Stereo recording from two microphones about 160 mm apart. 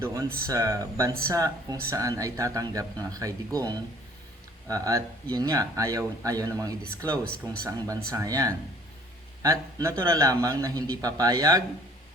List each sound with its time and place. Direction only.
0.0 s a man's voice: 20° right (ahead or behind)